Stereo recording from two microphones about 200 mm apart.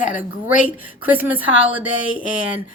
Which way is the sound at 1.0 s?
10° right (ahead or behind).